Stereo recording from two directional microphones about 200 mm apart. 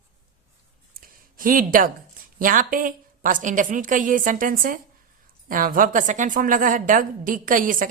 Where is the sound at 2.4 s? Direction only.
45° right (ahead or behind).